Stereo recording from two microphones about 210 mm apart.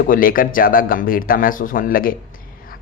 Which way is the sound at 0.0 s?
45° left (ahead or behind).